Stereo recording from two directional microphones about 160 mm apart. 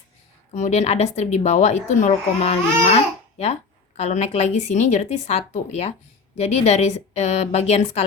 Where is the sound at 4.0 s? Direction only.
45° left (ahead or behind).